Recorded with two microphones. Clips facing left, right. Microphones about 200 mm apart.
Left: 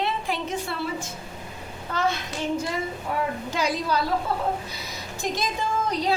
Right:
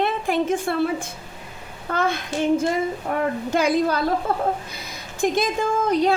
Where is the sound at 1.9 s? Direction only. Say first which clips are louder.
Right 5 dB; 55° right (ahead or behind).